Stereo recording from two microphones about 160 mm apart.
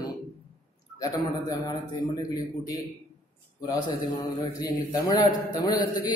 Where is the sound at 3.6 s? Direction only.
25° left (ahead or behind).